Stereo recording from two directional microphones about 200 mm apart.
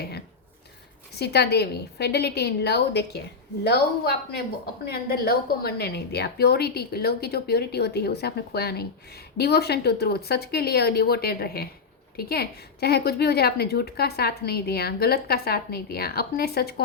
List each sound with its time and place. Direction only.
1.1 s a woman's voice: 55° left (ahead or behind)